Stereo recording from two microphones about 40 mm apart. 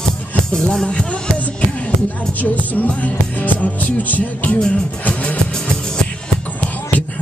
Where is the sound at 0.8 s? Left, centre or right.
Left.